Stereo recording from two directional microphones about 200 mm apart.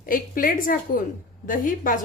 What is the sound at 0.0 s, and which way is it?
Speech, 45° left (ahead or behind).